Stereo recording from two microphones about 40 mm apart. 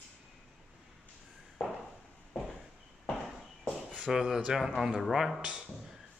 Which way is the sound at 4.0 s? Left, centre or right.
Centre.